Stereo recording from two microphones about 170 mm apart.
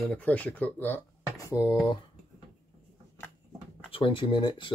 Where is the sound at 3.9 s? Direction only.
30° left (ahead or behind).